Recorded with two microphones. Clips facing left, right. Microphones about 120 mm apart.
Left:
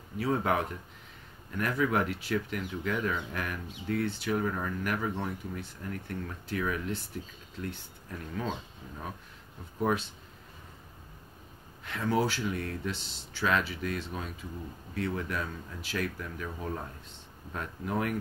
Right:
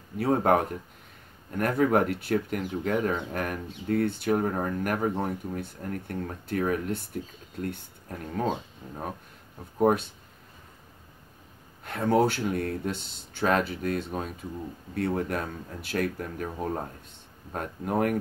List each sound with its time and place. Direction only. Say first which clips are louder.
0.2 s speech: right 6 dB; 50° right (ahead or behind)
11.8 s speech: right 6 dB; 50° right (ahead or behind)